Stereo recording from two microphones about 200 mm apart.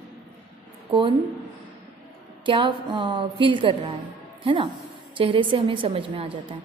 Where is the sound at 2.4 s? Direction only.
25° right (ahead or behind).